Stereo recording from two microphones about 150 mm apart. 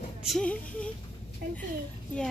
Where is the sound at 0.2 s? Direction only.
5° left (ahead or behind).